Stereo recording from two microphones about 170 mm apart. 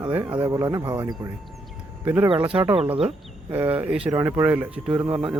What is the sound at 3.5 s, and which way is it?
Speech, 10° right (ahead or behind).